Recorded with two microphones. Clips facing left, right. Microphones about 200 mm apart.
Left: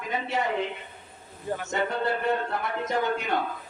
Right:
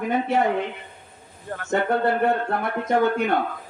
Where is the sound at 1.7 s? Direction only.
55° right (ahead or behind).